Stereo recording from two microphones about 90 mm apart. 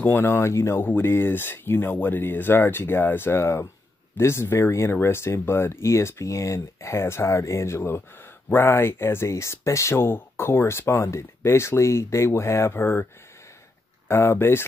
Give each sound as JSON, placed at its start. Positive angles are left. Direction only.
{"t": 0.0, "sound": "speech", "side_deg": 25}
{"t": 14.0, "sound": "speech", "side_deg": 30}